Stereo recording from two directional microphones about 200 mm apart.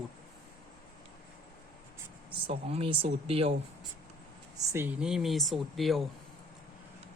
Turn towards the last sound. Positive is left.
turn(degrees=0)  # may be behind; listen again after turning